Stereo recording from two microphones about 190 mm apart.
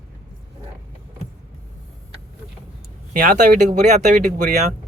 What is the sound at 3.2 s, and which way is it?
Speech, 40° right (ahead or behind).